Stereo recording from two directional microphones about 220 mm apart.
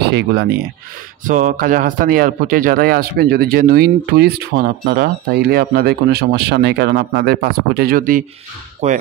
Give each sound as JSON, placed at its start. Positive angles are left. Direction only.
{"t": 1.2, "sound": "a man's voice", "side_deg": -35}
{"t": 8.8, "sound": "speech", "side_deg": -30}